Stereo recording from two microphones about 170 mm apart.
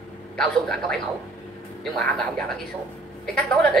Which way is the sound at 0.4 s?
5° left (ahead or behind).